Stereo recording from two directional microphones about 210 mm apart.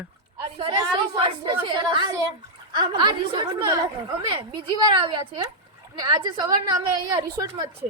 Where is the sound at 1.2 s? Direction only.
25° right (ahead or behind).